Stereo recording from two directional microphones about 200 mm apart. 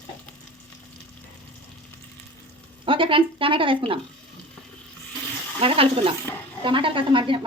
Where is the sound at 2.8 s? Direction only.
25° right (ahead or behind).